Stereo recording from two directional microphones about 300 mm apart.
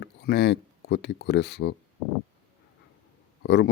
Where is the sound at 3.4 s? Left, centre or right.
Left.